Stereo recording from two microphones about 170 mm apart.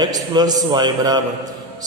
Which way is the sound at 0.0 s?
25° right (ahead or behind).